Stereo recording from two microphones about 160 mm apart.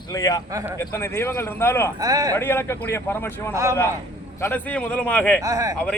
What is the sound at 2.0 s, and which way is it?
Speech, 25° right (ahead or behind).